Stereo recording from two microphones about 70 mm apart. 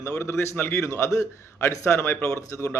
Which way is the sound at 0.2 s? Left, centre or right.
Left.